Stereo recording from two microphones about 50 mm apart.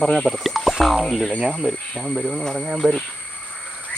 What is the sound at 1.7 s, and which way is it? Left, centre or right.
Speech, left.